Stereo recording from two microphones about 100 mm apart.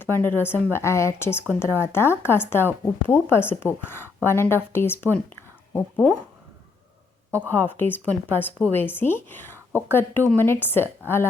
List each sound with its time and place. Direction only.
0.0 s speech: 20° left (ahead or behind)
7.3 s speech: 20° left (ahead or behind)